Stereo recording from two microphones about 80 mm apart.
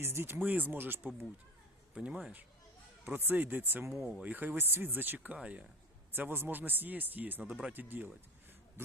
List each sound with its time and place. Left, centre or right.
0.0 s speech: right
2.0 s speech: centre
3.2 s speech: right